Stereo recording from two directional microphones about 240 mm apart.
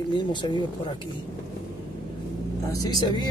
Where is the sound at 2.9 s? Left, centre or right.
Centre.